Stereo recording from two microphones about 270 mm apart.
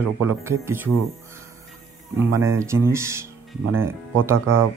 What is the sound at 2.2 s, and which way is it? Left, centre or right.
Speech, centre.